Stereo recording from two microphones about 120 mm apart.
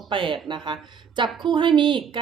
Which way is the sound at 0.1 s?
45° right (ahead or behind).